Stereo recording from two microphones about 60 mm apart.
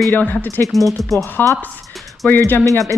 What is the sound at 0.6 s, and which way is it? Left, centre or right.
Speech, centre.